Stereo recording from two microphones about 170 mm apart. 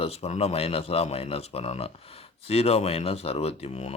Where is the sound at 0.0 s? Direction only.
35° left (ahead or behind).